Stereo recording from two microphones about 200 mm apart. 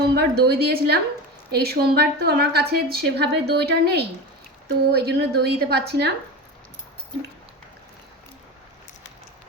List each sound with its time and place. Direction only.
0.1 s a woman's voice: 55° right (ahead or behind)